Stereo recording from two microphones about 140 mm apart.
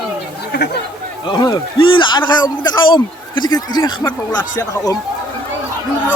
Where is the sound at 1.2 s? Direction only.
30° left (ahead or behind).